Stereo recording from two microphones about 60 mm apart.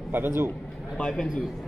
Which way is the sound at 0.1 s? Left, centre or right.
Right.